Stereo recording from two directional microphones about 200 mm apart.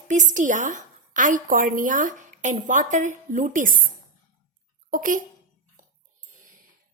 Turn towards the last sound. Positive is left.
turn(degrees=-40)  # may be behind; listen again after turning